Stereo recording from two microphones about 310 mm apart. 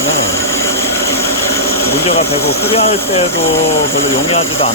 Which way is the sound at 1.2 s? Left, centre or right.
Left.